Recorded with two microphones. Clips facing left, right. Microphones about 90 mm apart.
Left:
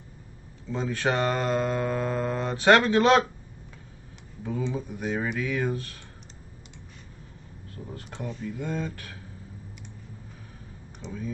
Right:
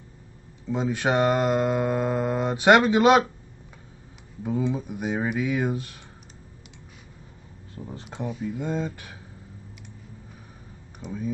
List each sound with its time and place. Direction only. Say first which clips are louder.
0.7 s mantra: right 3 dB; 15° right (ahead or behind)
4.4 s speech: right 4 dB; 15° right (ahead or behind)
4.6 s mantra: right 3 dB; 15° right (ahead or behind)
7.9 s speech: right 4 dB; 20° right (ahead or behind)
8.3 s mantra: right 4 dB; 5° right (ahead or behind)
8.5 s mantra: right 1 dB; 20° right (ahead or behind)
11.0 s speech: right 3 dB; 5° right (ahead or behind)